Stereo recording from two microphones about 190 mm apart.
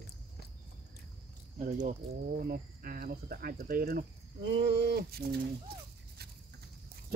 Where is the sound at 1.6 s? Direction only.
45° right (ahead or behind).